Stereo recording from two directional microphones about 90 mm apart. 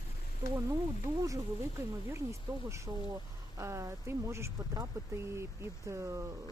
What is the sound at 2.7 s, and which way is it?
Speech, 35° right (ahead or behind).